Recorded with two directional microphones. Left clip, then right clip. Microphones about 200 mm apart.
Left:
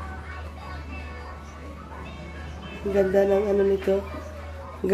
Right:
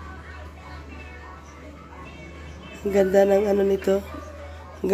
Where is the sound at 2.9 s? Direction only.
40° right (ahead or behind).